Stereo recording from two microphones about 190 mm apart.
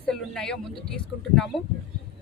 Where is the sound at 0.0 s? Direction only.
5° left (ahead or behind).